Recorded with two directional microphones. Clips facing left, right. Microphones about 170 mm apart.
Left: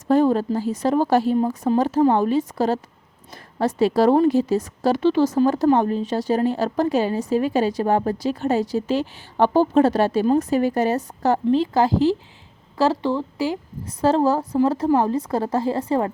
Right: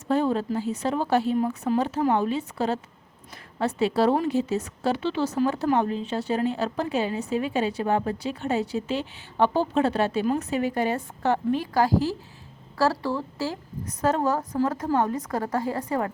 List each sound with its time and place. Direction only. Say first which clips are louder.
0.1 s a woman's voice: left 6 dB; 45° left (ahead or behind)
11.6 s a woman's voice: left 5 dB; 25° left (ahead or behind)
13.8 s a woman's voice: left 6 dB; 30° left (ahead or behind)